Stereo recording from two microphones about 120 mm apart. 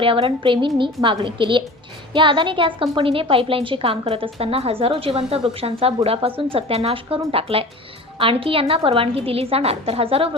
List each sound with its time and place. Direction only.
0.0 s a woman's voice: 50° right (ahead or behind)